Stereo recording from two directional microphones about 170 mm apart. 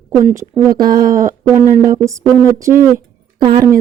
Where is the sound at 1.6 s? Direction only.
25° left (ahead or behind).